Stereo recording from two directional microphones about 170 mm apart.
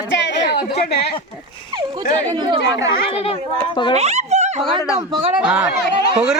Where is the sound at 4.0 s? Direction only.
40° right (ahead or behind).